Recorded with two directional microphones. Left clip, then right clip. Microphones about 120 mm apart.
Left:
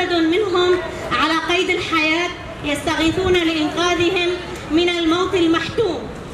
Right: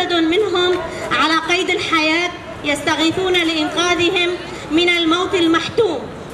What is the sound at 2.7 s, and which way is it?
A woman's voice, 35° right (ahead or behind).